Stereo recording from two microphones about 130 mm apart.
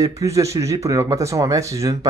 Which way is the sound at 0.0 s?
25° right (ahead or behind).